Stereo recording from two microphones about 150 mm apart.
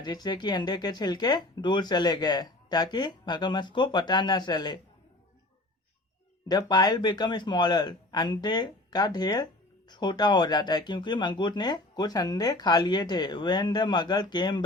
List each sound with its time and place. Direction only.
0.0 s speech: 30° left (ahead or behind)
6.5 s speech: 30° left (ahead or behind)